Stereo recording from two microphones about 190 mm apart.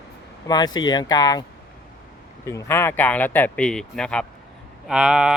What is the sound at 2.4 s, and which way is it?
Speech, 15° left (ahead or behind).